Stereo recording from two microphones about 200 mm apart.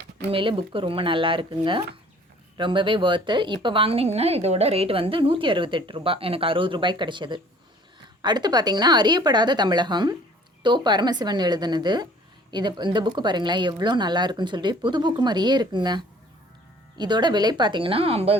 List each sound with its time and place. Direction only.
0.3 s a woman's voice: 25° right (ahead or behind)